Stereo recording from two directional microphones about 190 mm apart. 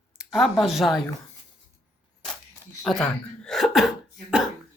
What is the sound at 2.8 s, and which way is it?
Speech, centre (ahead or behind).